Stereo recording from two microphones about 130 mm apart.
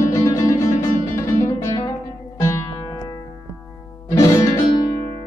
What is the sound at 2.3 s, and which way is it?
Music, 25° left (ahead or behind).